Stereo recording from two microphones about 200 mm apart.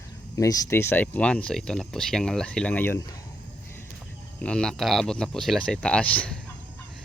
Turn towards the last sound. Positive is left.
turn(degrees=5)  # may be behind; listen again after turning